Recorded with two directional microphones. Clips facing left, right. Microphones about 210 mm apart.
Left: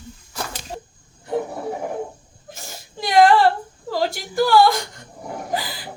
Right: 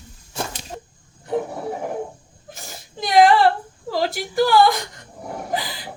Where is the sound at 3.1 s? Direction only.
Centre (ahead or behind).